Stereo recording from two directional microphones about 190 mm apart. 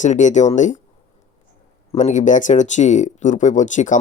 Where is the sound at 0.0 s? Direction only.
40° left (ahead or behind).